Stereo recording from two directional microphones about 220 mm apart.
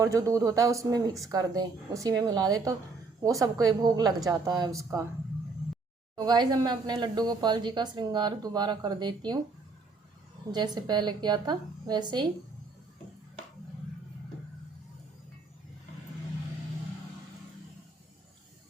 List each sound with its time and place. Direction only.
0.0 s speech: 15° right (ahead or behind)
6.1 s a woman's voice: 20° right (ahead or behind)
10.5 s a woman's voice: 20° right (ahead or behind)